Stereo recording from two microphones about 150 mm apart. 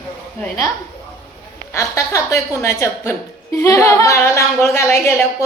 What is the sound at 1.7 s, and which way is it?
A woman's voice, 20° left (ahead or behind).